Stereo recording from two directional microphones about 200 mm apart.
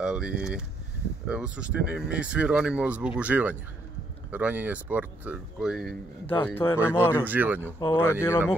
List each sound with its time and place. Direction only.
0.0 s speech: 5° right (ahead or behind)
6.4 s speech: 10° left (ahead or behind)
7.2 s speech: 10° right (ahead or behind)
8.0 s speech: 15° left (ahead or behind)